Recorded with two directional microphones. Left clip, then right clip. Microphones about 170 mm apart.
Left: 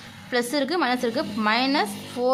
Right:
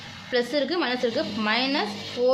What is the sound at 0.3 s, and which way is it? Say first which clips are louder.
A woman's voice: even; 40° left (ahead or behind).